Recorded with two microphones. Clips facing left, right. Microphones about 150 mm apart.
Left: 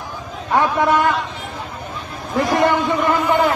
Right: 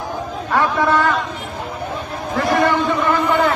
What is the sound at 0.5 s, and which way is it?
Speech, 15° left (ahead or behind).